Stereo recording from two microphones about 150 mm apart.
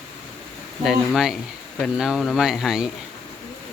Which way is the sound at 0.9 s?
Centre (ahead or behind).